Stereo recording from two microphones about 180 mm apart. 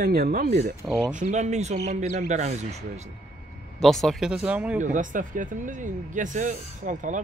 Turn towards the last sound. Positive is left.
turn(degrees=-45)  # may be behind; listen again after turning